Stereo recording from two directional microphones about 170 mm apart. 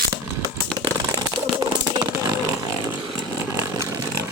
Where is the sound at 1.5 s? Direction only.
25° right (ahead or behind).